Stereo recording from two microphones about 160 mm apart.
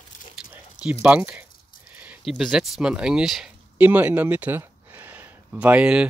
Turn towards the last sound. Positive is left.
turn(degrees=-10)  # may be behind; listen again after turning